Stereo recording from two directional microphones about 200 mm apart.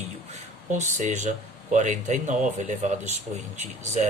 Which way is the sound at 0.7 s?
35° right (ahead or behind).